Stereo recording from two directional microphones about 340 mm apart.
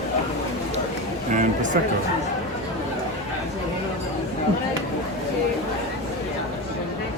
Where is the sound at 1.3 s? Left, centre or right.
Right.